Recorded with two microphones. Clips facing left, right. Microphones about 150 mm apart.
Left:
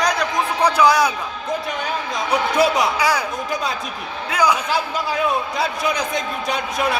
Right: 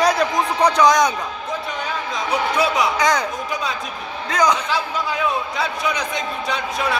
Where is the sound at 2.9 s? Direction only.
10° left (ahead or behind).